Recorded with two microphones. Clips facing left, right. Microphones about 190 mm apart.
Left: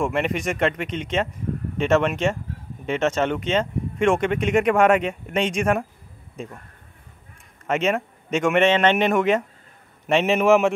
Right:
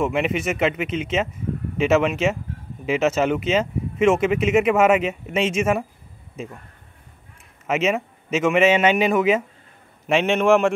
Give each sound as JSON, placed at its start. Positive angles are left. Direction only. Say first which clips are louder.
{"t": 0.0, "sound": "speech", "louder": "right 1 dB", "side_deg": 0}
{"t": 7.6, "sound": "speech", "louder": "right 1 dB", "side_deg": -5}